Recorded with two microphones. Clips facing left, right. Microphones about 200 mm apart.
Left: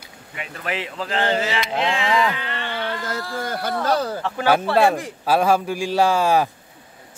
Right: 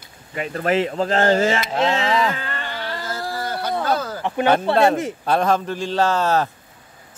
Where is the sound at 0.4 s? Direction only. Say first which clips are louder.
Right 9 dB; 45° right (ahead or behind).